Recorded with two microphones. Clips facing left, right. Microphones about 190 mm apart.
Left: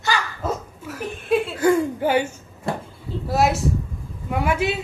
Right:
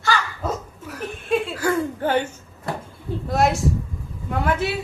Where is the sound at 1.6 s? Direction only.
15° left (ahead or behind).